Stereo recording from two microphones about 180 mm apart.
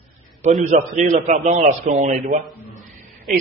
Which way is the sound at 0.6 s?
40° right (ahead or behind).